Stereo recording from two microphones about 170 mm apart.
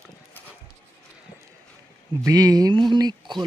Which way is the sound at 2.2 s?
20° right (ahead or behind).